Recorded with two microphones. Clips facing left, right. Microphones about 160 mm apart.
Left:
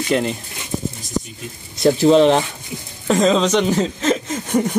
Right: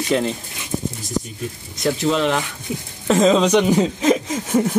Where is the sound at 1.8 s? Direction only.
30° left (ahead or behind).